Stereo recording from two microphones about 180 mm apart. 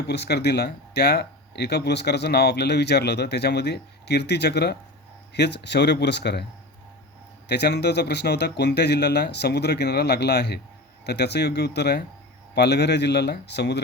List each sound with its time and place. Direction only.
0.1 s speech: 70° left (ahead or behind)
7.4 s speech: 65° left (ahead or behind)